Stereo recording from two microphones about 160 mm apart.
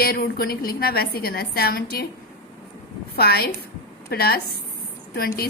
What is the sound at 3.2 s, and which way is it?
A woman's voice, 75° left (ahead or behind).